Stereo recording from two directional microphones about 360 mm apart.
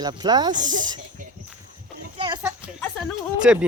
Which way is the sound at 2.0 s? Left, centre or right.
Centre.